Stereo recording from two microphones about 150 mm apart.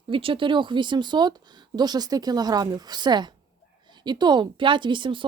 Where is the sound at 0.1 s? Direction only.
35° right (ahead or behind).